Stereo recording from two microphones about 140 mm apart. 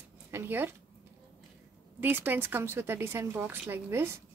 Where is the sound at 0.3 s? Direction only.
15° right (ahead or behind).